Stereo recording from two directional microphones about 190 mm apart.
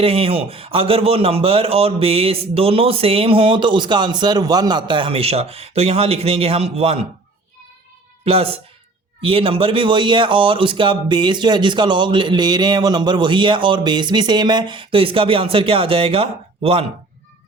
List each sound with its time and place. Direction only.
0.0 s a man's voice: 30° right (ahead or behind)
8.2 s a man's voice: 30° right (ahead or behind)